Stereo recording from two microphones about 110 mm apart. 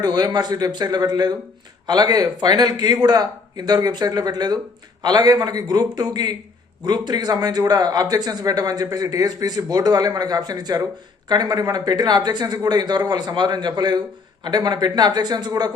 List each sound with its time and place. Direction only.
0.0 s a man's voice: 35° right (ahead or behind)